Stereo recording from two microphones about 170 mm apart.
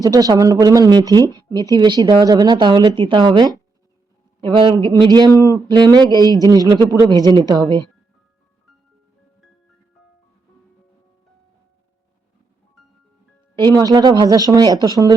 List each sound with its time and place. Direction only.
0.0 s speech: 20° right (ahead or behind)
13.6 s speech: 25° right (ahead or behind)